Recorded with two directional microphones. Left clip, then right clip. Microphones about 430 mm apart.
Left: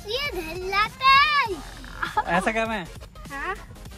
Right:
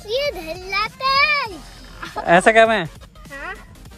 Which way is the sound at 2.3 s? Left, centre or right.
Centre.